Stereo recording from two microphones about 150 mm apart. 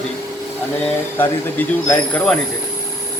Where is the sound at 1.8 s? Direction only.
10° left (ahead or behind).